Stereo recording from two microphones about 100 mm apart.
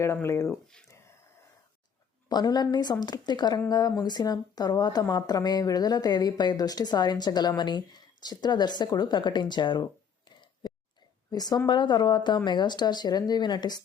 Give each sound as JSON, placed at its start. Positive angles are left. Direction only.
{"t": 0.0, "sound": "speech", "side_deg": 25}
{"t": 2.3, "sound": "speech", "side_deg": 45}